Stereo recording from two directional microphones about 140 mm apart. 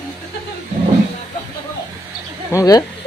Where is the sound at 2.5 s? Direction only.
25° left (ahead or behind).